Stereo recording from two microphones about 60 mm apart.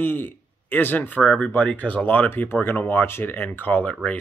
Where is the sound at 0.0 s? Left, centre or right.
Left.